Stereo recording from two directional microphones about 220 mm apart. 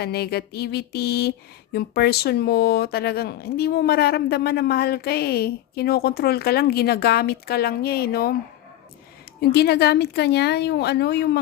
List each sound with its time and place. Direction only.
0.0 s speech: 45° left (ahead or behind)
9.4 s speech: 45° left (ahead or behind)